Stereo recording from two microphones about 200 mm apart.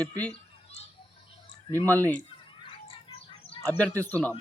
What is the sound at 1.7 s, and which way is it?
Speech, 10° left (ahead or behind).